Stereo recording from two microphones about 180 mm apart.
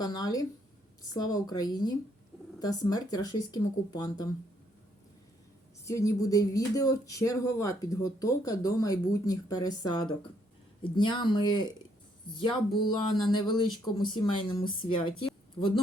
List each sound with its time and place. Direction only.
0.0 s speech: 20° left (ahead or behind)
5.8 s speech: 15° left (ahead or behind)